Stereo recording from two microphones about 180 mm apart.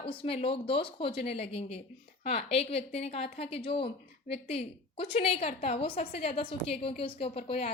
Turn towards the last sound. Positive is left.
turn(degrees=35)  # may be behind; listen again after turning